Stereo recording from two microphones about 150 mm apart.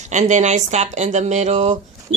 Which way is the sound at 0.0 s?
55° right (ahead or behind).